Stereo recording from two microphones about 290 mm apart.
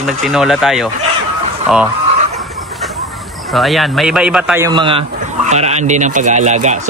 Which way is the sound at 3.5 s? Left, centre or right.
Centre.